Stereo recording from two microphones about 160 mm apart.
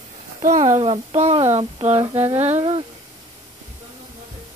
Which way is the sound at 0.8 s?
35° right (ahead or behind).